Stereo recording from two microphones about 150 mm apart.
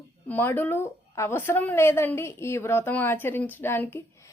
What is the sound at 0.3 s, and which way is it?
A woman's voice, 10° left (ahead or behind).